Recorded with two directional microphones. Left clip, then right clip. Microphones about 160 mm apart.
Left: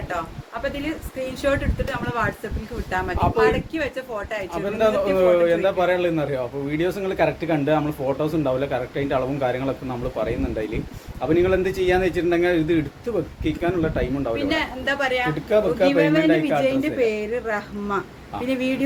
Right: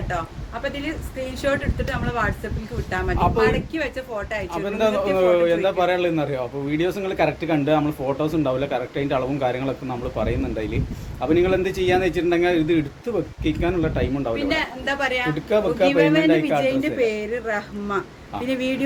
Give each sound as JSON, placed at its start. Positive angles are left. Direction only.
{"t": 1.5, "sound": "speech", "side_deg": 5}
{"t": 4.5, "sound": "a man's voice", "side_deg": -25}
{"t": 14.3, "sound": "speech", "side_deg": 5}
{"t": 15.4, "sound": "a man's voice", "side_deg": -25}
{"t": 16.6, "sound": "speech", "side_deg": 0}